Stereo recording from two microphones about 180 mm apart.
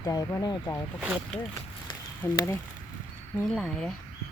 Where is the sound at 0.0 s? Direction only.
20° left (ahead or behind).